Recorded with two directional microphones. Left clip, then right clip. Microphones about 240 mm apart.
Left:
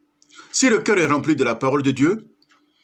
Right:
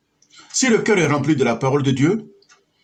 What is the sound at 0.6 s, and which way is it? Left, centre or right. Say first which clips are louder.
Speech: right 1 dB; left.